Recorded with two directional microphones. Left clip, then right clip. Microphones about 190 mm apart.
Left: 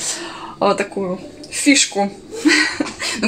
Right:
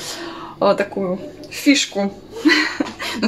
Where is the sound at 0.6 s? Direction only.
5° left (ahead or behind).